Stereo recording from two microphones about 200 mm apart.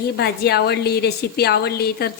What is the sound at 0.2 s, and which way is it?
Speech, 55° left (ahead or behind).